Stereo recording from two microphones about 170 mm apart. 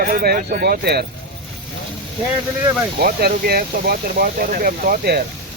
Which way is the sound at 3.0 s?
65° right (ahead or behind).